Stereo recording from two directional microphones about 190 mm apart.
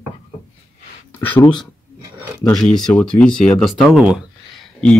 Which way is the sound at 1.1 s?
10° left (ahead or behind).